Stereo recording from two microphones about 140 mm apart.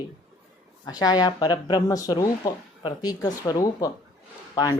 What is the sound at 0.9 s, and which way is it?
Speech, 30° left (ahead or behind).